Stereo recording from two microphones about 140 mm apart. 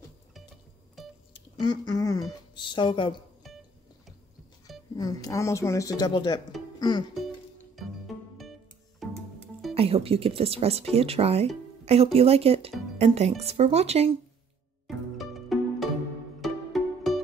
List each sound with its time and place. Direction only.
1.0 s music: centre (ahead or behind)
1.3 s speech: 35° left (ahead or behind)
3.4 s music: centre (ahead or behind)
4.9 s speech: 25° left (ahead or behind)
6.8 s music: 30° left (ahead or behind)
9.0 s music: centre (ahead or behind)
9.8 s speech: 45° right (ahead or behind)
15.1 s music: centre (ahead or behind)